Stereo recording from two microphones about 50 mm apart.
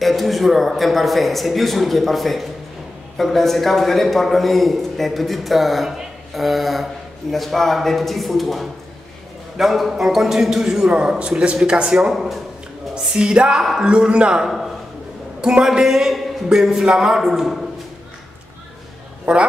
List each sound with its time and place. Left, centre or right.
0.0 s a man's voice: centre
12.1 s a man's voice: centre
12.9 s a man's voice: centre